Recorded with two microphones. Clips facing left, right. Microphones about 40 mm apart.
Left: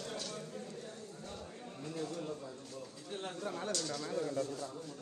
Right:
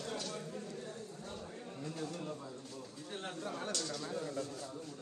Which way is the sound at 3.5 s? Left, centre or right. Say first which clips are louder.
Left 1 dB; right.